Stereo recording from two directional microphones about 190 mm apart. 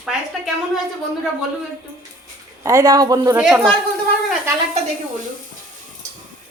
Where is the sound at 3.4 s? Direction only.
Centre (ahead or behind).